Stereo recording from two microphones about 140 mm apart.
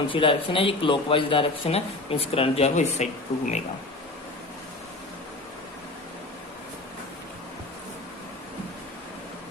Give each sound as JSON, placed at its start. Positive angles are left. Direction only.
{"t": 0.1, "sound": "speech", "side_deg": 40}